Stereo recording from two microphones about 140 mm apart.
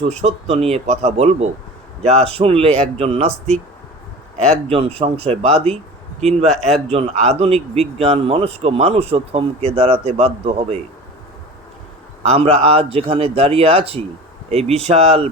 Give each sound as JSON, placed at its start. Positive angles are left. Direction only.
{"t": 0.1, "sound": "a man's voice", "side_deg": -50}
{"t": 4.7, "sound": "a man's voice", "side_deg": -45}
{"t": 6.7, "sound": "speech", "side_deg": 5}
{"t": 6.9, "sound": "a man's voice", "side_deg": -50}
{"t": 12.2, "sound": "a man's voice", "side_deg": -50}